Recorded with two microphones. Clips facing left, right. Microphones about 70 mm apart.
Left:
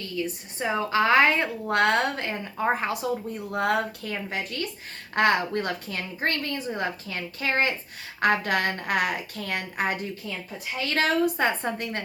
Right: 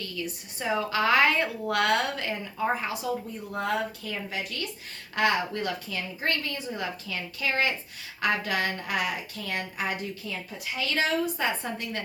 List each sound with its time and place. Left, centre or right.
0.0 s speech: left
2.8 s a woman's voice: left